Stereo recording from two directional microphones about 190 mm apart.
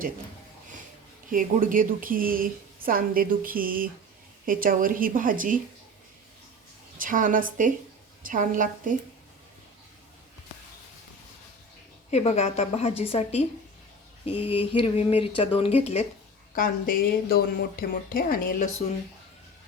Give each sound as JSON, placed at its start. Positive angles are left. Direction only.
{"t": 1.3, "sound": "a woman's voice", "side_deg": -45}
{"t": 7.0, "sound": "a woman's voice", "side_deg": -45}
{"t": 12.1, "sound": "a woman's voice", "side_deg": 35}
{"t": 14.4, "sound": "speech", "side_deg": 30}
{"t": 16.6, "sound": "speech", "side_deg": 50}